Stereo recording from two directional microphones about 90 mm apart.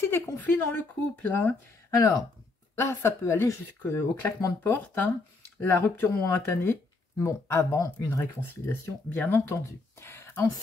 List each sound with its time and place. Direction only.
0.7 s speech: 20° left (ahead or behind)
2.0 s speech: 45° left (ahead or behind)
2.7 s speech: 30° left (ahead or behind)
6.2 s speech: 30° left (ahead or behind)
9.1 s speech: 20° left (ahead or behind)
9.5 s a sound: 30° left (ahead or behind)